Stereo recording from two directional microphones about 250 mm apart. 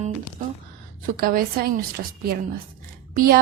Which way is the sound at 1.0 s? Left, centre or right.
Right.